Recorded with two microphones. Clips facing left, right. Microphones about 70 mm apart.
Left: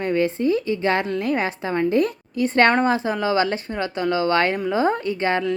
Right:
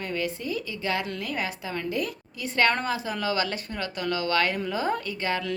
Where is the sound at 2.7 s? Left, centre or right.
Left.